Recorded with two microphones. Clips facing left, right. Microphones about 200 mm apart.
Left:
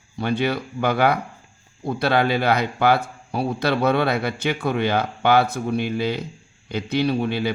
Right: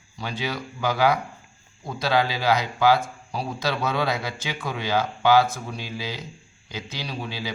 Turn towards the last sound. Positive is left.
turn(degrees=60)  # may be behind; listen again after turning